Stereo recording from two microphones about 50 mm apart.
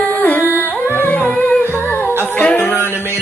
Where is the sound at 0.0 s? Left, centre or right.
Left.